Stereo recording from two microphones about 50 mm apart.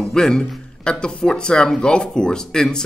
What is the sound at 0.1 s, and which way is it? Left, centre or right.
A man's voice, centre.